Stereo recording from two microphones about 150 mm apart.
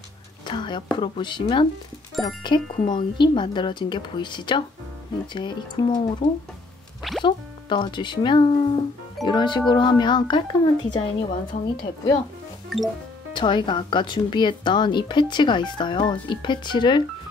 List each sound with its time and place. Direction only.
0.5 s speech: 30° left (ahead or behind)
7.0 s music: centre (ahead or behind)
7.2 s speech: 30° left (ahead or behind)
12.6 s music: centre (ahead or behind)
13.3 s speech: 30° left (ahead or behind)